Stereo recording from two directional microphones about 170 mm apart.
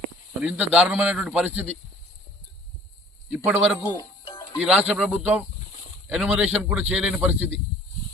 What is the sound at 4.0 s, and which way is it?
Music, 30° left (ahead or behind).